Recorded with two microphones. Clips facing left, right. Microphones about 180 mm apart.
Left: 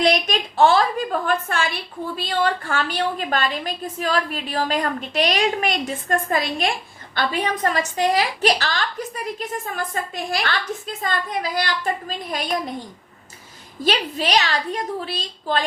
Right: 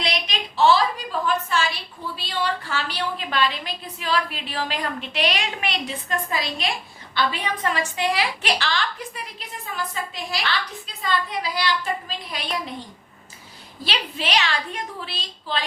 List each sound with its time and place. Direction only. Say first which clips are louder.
0.0 s a woman's voice: left 8 dB; 45° left (ahead or behind)
13.8 s a woman's voice: left 6 dB; 40° left (ahead or behind)